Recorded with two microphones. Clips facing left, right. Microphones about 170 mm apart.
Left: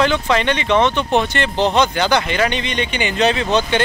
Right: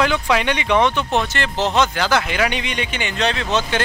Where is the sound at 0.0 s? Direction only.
5° right (ahead or behind).